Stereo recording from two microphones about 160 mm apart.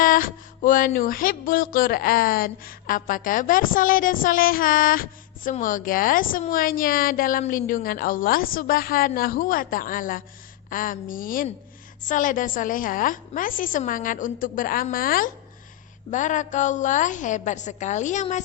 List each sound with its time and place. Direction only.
0.0 s music: 60° left (ahead or behind)
16.0 s a woman's voice: 50° left (ahead or behind)